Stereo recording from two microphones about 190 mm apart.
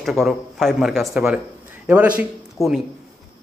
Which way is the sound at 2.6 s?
15° left (ahead or behind).